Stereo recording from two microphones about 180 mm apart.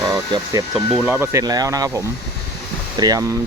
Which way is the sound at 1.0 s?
10° right (ahead or behind).